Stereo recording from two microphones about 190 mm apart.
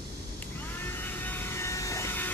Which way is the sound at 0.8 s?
10° left (ahead or behind).